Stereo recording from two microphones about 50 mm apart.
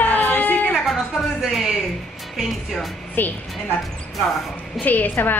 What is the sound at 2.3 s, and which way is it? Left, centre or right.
Speech, centre.